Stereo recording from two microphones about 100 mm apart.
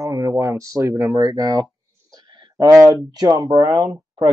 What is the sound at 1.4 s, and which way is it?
Speech, 45° right (ahead or behind).